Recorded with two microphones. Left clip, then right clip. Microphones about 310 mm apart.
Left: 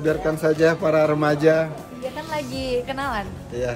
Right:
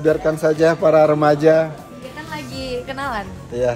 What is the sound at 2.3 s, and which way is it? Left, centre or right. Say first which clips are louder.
Music: left 1 dB; centre.